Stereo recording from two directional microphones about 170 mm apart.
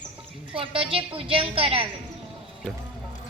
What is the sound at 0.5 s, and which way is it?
A woman's voice, 30° right (ahead or behind).